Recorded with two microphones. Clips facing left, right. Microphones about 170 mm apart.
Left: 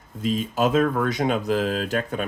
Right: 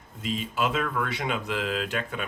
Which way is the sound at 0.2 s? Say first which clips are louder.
Left 6 dB; 40° left (ahead or behind).